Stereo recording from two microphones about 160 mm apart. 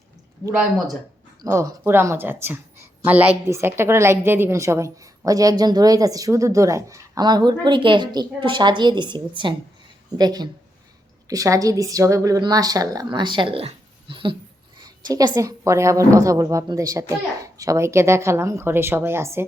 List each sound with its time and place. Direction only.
0.4 s a woman's voice: 20° right (ahead or behind)